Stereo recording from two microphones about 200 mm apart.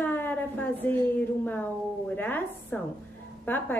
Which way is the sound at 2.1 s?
10° left (ahead or behind).